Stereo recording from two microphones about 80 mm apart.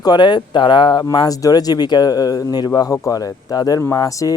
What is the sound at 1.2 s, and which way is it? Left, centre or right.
Speech, left.